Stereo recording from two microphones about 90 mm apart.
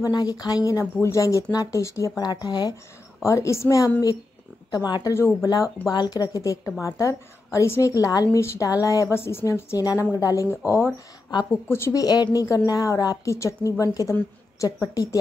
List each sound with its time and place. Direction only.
0.0 s a woman's voice: 45° left (ahead or behind)
3.3 s a woman's voice: 35° left (ahead or behind)
4.6 s a woman's voice: 50° left (ahead or behind)
5.1 s speech: 30° left (ahead or behind)
5.5 s a woman's voice: 45° left (ahead or behind)
9.8 s a woman's voice: 45° left (ahead or behind)
10.7 s a woman's voice: 25° left (ahead or behind)